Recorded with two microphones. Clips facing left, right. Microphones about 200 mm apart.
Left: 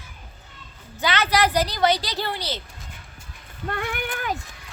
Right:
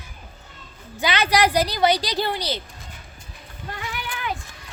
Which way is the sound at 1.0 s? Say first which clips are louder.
Right 1 dB; 15° right (ahead or behind).